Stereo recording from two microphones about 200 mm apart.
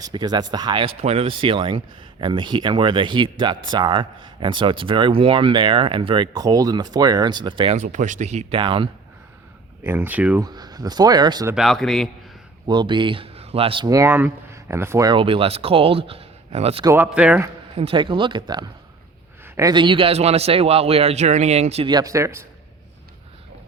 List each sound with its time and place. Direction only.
0.0 s speech: 20° right (ahead or behind)
9.8 s speech: 10° right (ahead or behind)
10.4 s speech: 20° right (ahead or behind)
11.5 s speech: centre (ahead or behind)
12.6 s speech: 20° right (ahead or behind)
16.8 s speech: 10° right (ahead or behind)
17.7 s speech: 25° right (ahead or behind)